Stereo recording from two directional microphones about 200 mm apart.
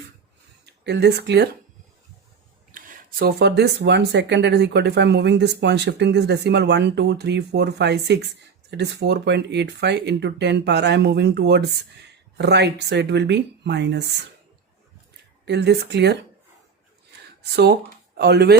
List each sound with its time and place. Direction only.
0.6 s speech: 55° right (ahead or behind)
2.7 s speech: 50° right (ahead or behind)
15.4 s speech: 55° right (ahead or behind)
17.1 s a sound: 55° right (ahead or behind)
18.2 s speech: 55° right (ahead or behind)